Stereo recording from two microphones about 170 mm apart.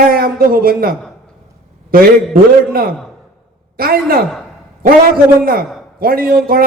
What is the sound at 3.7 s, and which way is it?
Speech, 60° right (ahead or behind).